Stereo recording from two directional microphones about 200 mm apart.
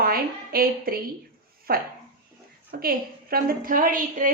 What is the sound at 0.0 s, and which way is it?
A woman's voice, 50° right (ahead or behind).